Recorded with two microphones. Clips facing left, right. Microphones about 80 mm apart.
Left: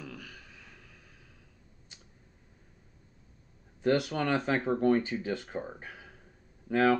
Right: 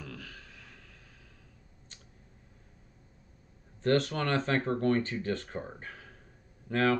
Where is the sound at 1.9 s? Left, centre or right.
Centre.